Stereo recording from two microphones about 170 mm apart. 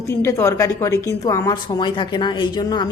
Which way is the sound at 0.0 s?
15° left (ahead or behind).